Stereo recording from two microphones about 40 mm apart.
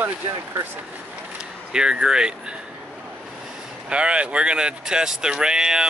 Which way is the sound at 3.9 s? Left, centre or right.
Right.